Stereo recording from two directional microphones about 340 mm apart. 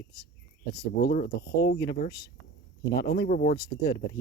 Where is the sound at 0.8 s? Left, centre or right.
Left.